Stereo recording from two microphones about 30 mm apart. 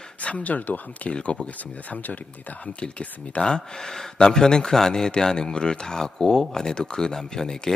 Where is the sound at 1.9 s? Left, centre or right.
Left.